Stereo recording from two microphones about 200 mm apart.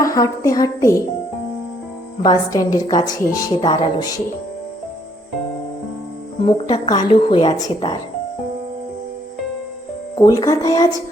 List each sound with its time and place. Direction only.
0.0 s a woman's voice: 15° left (ahead or behind)
2.2 s a woman's voice: 20° left (ahead or behind)
6.7 s a woman's voice: 20° left (ahead or behind)
10.2 s a woman's voice: 15° left (ahead or behind)